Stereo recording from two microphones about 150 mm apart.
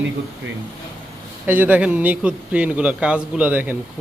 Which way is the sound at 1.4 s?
10° right (ahead or behind).